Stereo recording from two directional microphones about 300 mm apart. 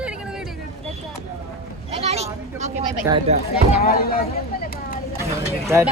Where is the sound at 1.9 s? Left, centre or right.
Right.